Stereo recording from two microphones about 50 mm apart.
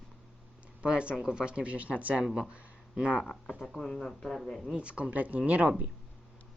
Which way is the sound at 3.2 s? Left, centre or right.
Centre.